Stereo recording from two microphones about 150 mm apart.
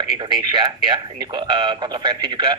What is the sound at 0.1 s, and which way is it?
A man's voice, 30° right (ahead or behind).